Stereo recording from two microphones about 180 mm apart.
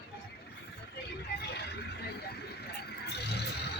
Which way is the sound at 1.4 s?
65° left (ahead or behind).